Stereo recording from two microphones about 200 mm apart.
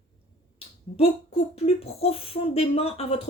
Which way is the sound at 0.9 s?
30° left (ahead or behind).